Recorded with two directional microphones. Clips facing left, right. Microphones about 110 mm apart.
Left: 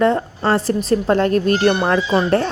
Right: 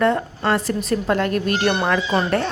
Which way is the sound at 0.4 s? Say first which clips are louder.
Left 3 dB; 35° left (ahead or behind).